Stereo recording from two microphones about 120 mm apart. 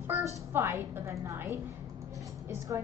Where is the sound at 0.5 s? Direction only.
20° right (ahead or behind).